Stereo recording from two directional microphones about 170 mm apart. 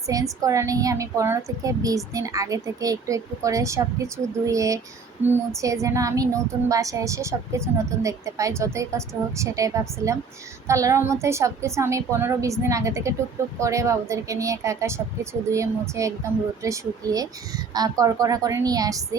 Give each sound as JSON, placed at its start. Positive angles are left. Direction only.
{"t": 0.1, "sound": "a woman's voice", "side_deg": -20}